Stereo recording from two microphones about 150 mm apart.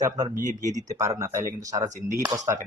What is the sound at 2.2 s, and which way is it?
Speech, 20° right (ahead or behind).